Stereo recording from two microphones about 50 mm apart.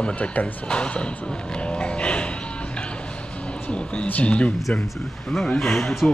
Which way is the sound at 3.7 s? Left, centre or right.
Left.